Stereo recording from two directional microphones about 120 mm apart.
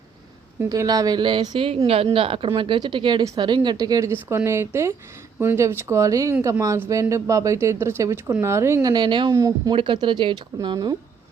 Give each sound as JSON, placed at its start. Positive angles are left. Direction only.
{"t": 0.7, "sound": "speech", "side_deg": -30}
{"t": 8.9, "sound": "speech", "side_deg": -40}
{"t": 9.3, "sound": "speech", "side_deg": -30}
{"t": 9.7, "sound": "speech", "side_deg": -45}